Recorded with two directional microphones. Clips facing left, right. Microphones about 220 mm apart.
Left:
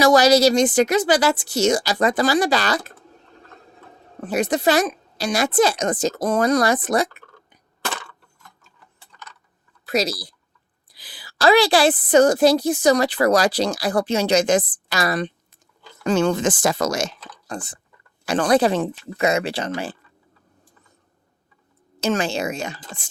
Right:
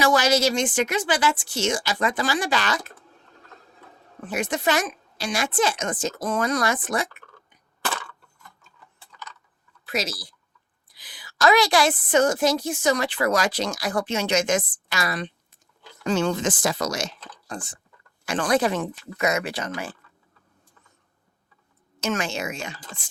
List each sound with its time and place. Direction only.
0.0 s a woman's voice: 40° left (ahead or behind)
4.2 s a woman's voice: 35° left (ahead or behind)
9.8 s a woman's voice: 40° left (ahead or behind)
16.0 s speech: 55° left (ahead or behind)
18.3 s a woman's voice: 35° left (ahead or behind)
22.0 s a woman's voice: 35° left (ahead or behind)